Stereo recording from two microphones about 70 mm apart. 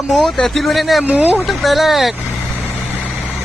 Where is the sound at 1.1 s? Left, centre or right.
Right.